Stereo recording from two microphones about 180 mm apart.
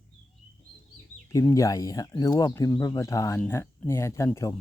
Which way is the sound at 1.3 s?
15° left (ahead or behind).